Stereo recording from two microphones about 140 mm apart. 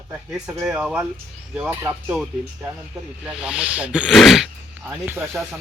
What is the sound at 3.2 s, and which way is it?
Speech, 5° right (ahead or behind).